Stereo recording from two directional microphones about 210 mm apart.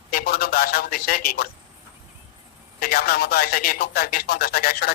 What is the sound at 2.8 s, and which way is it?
Speech, 45° left (ahead or behind).